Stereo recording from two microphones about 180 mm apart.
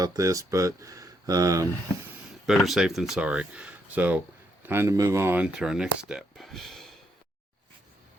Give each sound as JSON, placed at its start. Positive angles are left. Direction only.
{"t": 0.0, "sound": "speech", "side_deg": -20}
{"t": 2.5, "sound": "speech", "side_deg": 0}